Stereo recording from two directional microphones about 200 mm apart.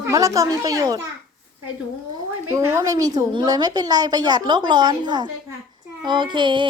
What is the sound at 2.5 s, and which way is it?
A woman's voice, 15° right (ahead or behind).